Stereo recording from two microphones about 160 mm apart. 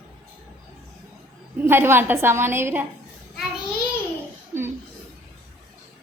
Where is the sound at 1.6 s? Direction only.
15° right (ahead or behind).